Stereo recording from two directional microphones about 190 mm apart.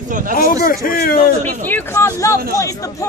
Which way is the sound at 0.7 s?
50° left (ahead or behind).